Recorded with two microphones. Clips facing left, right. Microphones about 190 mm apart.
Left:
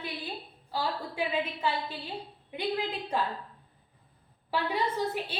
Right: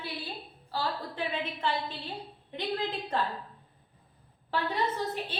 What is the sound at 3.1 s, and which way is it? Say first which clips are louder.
Speech: left 1 dB; 10° left (ahead or behind).